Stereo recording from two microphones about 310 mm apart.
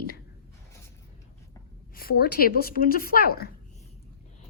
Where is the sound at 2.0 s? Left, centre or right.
Left.